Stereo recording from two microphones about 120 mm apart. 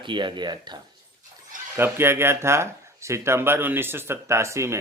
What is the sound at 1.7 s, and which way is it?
Speech, 20° right (ahead or behind).